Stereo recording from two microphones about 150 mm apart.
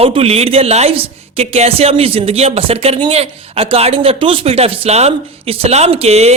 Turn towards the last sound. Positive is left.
turn(degrees=-45)  # may be behind; listen again after turning